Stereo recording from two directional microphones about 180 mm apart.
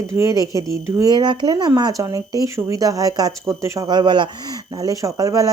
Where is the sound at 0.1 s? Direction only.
15° right (ahead or behind).